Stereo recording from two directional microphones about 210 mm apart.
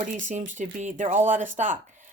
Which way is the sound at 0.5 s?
35° right (ahead or behind).